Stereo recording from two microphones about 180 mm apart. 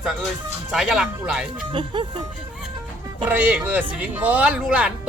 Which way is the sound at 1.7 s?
25° right (ahead or behind).